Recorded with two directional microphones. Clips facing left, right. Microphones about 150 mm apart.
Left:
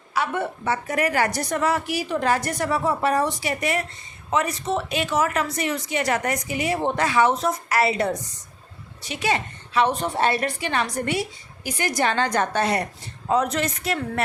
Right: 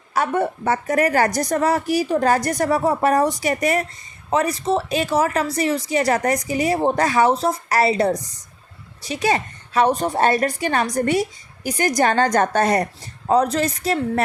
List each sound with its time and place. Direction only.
0.1 s a woman's voice: 45° right (ahead or behind)